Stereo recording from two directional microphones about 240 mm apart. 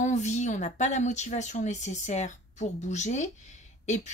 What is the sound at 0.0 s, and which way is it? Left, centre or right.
A woman's voice, left.